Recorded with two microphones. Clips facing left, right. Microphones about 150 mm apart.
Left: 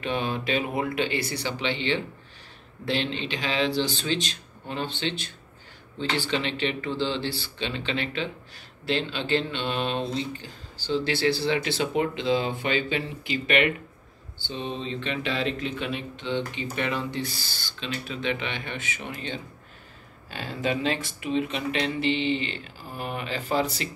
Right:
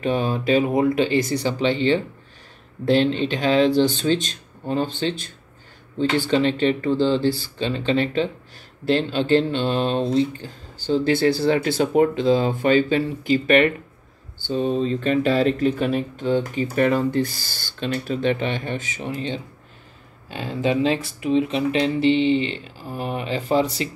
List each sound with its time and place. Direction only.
0.0 s speech: 40° right (ahead or behind)